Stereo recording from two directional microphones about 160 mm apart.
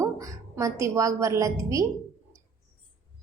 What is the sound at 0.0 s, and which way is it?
A woman's voice, 20° right (ahead or behind).